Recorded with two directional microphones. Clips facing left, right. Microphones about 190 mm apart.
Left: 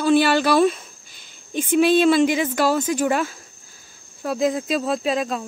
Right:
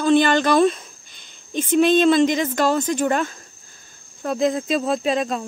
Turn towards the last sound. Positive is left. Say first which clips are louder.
# right 1 dB
turn(degrees=0)  # may be behind; listen again after turning